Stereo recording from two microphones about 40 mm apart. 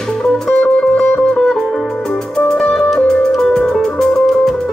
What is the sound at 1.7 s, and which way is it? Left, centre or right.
Music, centre.